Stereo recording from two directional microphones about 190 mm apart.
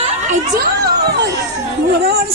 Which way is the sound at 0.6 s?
55° right (ahead or behind).